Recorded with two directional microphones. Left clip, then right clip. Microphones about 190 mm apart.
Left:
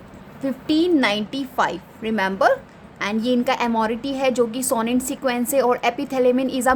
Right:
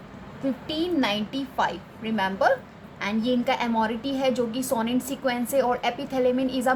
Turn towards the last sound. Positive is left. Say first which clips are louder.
# left 5 dB
turn(degrees=45)  # may be behind; listen again after turning